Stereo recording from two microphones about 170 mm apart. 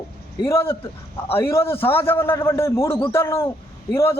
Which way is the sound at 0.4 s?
15° left (ahead or behind).